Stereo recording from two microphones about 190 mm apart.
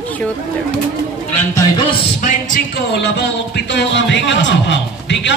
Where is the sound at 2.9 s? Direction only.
65° left (ahead or behind).